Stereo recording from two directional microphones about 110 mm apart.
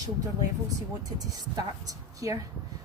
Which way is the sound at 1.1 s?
35° right (ahead or behind).